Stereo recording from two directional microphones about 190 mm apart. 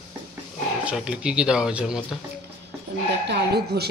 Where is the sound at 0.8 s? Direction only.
5° right (ahead or behind).